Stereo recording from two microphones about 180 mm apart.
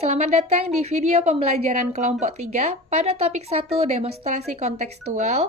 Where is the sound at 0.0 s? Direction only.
35° right (ahead or behind).